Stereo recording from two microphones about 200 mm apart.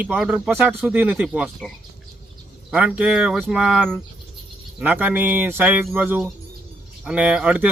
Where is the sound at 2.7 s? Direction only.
5° right (ahead or behind).